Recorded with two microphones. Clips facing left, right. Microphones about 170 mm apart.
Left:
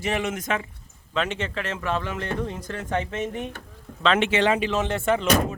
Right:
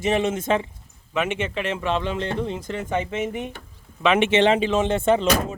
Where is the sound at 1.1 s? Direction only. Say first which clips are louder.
Right 2 dB; 10° right (ahead or behind).